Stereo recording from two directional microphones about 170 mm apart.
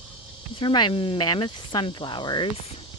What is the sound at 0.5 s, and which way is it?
Speech, 25° left (ahead or behind).